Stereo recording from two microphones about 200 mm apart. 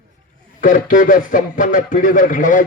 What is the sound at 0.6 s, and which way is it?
A man's voice, 40° left (ahead or behind).